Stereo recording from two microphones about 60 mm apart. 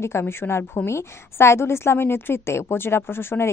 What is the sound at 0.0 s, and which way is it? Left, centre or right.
A woman's voice, left.